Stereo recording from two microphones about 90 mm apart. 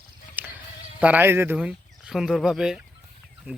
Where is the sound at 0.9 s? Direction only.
15° right (ahead or behind).